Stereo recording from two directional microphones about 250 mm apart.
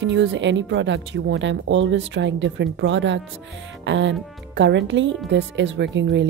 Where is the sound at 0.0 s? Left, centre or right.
Right.